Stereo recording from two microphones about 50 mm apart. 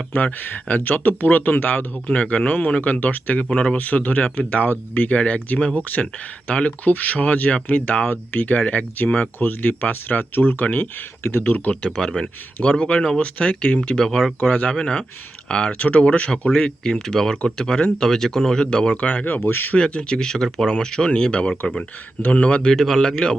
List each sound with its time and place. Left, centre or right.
0.1 s speech: left
3.8 s speech: left
11.4 s speech: left
11.9 s speech: centre
13.9 s speech: centre
19.0 s speech: left
19.5 s speech: left
19.7 s speech: left
22.7 s speech: centre